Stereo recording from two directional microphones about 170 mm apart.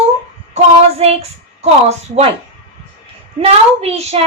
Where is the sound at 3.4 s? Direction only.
35° right (ahead or behind).